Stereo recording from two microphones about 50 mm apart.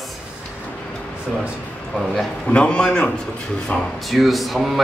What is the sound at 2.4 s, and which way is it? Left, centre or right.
Speech, left.